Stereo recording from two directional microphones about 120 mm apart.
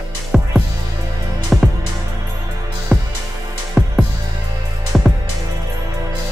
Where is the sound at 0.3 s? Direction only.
Centre (ahead or behind).